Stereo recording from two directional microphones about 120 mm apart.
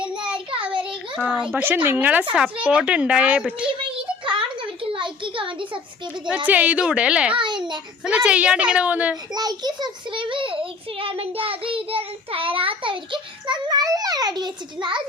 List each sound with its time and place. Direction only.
1.5 s a woman's voice: 15° right (ahead or behind)
4.3 s a sound: 45° right (ahead or behind)
6.2 s a woman's voice: 10° right (ahead or behind)
7.3 s babbling: 40° right (ahead or behind)
8.0 s a woman's voice: 10° right (ahead or behind)
9.3 s child singing: 35° right (ahead or behind)